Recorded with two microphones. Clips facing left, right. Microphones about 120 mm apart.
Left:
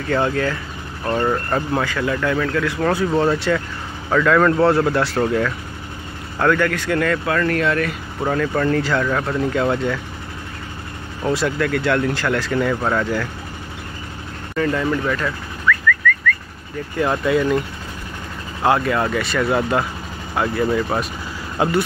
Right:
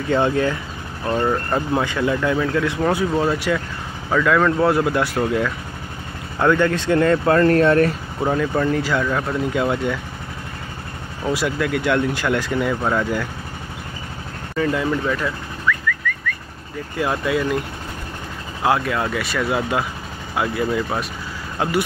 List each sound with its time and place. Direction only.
0.1 s speech: 20° right (ahead or behind)
1.0 s speech: 10° right (ahead or behind)
3.2 s speech: 10° right (ahead or behind)
6.4 s speech: 20° right (ahead or behind)
8.3 s speech: 15° right (ahead or behind)
11.2 s speech: 10° right (ahead or behind)
14.6 s car alarm: 10° right (ahead or behind)
17.0 s speech: 5° right (ahead or behind)
18.6 s speech: centre (ahead or behind)